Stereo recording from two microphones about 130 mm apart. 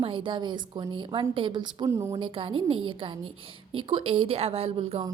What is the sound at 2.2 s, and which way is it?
A woman's voice, 45° right (ahead or behind).